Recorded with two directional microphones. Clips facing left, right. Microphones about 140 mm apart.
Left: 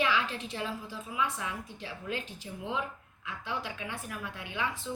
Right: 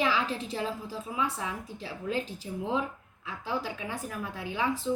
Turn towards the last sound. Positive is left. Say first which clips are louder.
# right 5 dB
turn(degrees=-35)  # may be behind; listen again after turning